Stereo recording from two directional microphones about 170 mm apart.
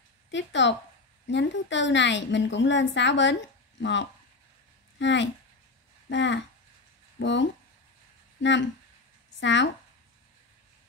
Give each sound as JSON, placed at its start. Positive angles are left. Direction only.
{"t": 0.3, "sound": "a woman's voice", "side_deg": 90}